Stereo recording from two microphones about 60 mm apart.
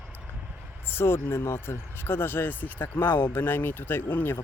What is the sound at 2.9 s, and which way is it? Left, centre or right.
Speech, left.